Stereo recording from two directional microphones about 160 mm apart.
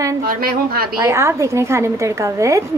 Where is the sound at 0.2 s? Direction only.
70° right (ahead or behind).